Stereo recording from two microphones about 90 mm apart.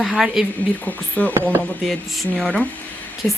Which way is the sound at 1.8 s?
Centre (ahead or behind).